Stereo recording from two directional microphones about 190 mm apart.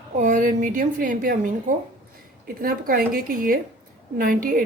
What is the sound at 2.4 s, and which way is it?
A woman's voice, 50° right (ahead or behind).